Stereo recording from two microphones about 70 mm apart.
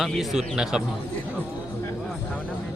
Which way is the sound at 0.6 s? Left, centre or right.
Centre.